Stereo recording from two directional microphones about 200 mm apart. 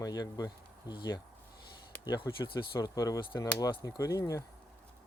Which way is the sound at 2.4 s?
25° left (ahead or behind).